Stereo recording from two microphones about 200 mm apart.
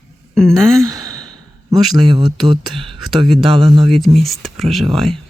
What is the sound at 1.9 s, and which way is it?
Speech, 20° right (ahead or behind).